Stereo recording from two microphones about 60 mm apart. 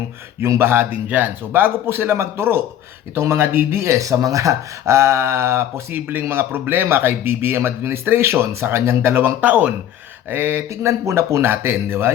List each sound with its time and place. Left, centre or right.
0.3 s speech: right
9.4 s speech: right
10.2 s speech: right
10.7 s speech: right